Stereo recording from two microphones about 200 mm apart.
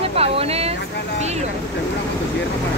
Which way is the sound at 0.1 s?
30° right (ahead or behind).